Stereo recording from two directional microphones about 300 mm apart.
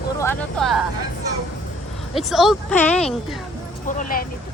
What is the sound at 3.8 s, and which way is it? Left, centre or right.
Speech, left.